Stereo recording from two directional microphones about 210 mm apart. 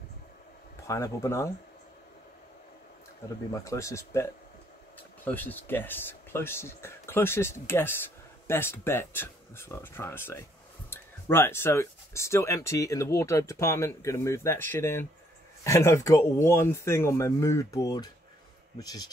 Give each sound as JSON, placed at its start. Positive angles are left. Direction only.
{"t": 0.8, "sound": "speech", "side_deg": 15}
{"t": 3.6, "sound": "speech", "side_deg": 15}